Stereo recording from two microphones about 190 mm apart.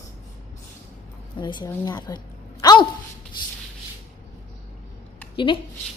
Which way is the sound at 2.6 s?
20° left (ahead or behind).